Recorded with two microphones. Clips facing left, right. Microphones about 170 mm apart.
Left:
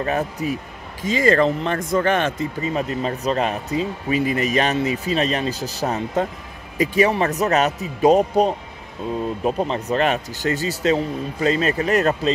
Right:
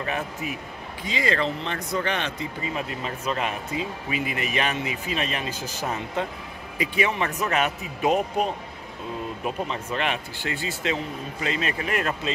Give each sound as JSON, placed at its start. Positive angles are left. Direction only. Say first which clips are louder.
{"t": 0.0, "sound": "speech", "louder": "left 7 dB", "side_deg": 40}